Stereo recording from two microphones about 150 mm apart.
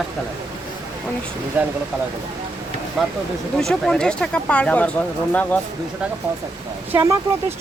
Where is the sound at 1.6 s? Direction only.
10° right (ahead or behind).